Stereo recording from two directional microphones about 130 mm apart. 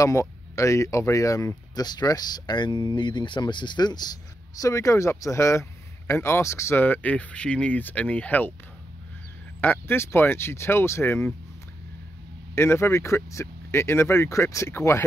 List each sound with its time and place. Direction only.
0.0 s speech: 25° left (ahead or behind)
9.6 s speech: 15° left (ahead or behind)
12.5 s speech: 20° left (ahead or behind)